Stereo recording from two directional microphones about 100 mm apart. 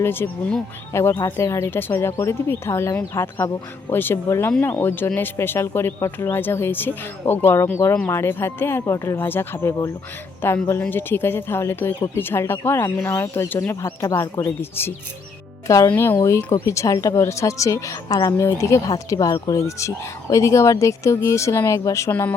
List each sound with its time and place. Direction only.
0.0 s speech: 20° left (ahead or behind)
15.6 s speech: 35° left (ahead or behind)
15.9 s a woman's voice: 25° left (ahead or behind)